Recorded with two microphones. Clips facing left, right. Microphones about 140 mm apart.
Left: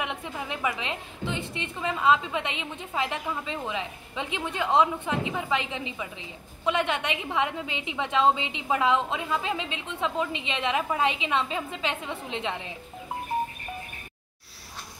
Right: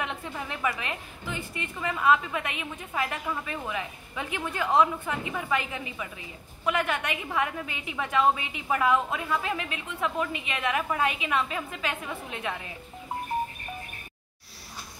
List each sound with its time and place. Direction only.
0.0 s a woman's voice: 15° left (ahead or behind)